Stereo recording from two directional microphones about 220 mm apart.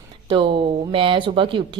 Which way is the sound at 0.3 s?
20° right (ahead or behind).